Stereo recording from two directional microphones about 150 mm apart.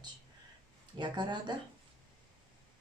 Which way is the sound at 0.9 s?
30° right (ahead or behind).